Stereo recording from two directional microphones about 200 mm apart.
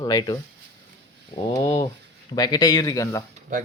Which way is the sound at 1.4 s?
20° left (ahead or behind).